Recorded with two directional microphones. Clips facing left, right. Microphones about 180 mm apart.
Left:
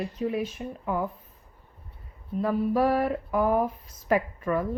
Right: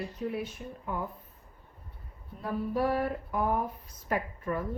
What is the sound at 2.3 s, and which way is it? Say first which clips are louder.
Speech: left 7 dB; 90° left.